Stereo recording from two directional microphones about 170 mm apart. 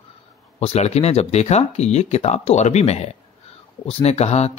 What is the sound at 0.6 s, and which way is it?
Speech, 40° left (ahead or behind).